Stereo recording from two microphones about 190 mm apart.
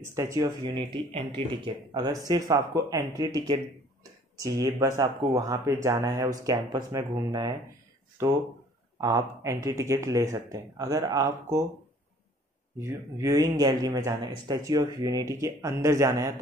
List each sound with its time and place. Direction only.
0.0 s speech: 15° right (ahead or behind)
12.7 s speech: 15° right (ahead or behind)